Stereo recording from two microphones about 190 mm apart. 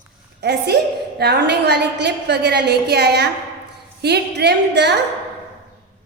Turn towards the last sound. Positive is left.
turn(degrees=-60)  # may be behind; listen again after turning